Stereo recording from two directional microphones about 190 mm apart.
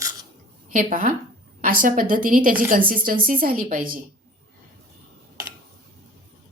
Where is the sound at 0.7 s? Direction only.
45° right (ahead or behind).